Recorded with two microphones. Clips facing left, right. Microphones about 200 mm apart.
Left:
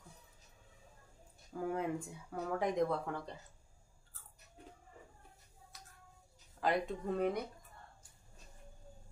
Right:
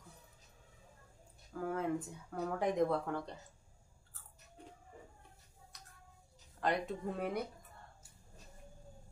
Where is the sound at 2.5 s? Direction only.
Centre (ahead or behind).